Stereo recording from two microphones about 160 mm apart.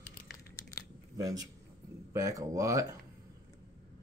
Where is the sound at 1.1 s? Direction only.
20° right (ahead or behind).